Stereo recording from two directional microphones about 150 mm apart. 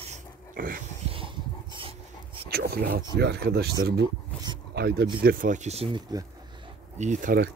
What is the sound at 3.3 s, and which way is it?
Speech, 90° right.